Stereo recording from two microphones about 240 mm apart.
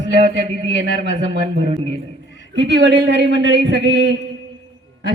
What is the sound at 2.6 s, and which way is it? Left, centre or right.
Speech, right.